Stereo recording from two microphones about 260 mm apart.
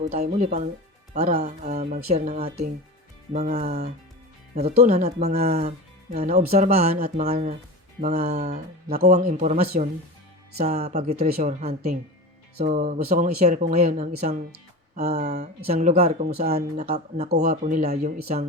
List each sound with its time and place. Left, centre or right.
0.1 s speech: right
16.5 s speech: right